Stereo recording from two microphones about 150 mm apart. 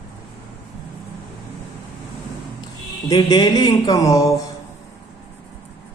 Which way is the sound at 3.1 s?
25° left (ahead or behind).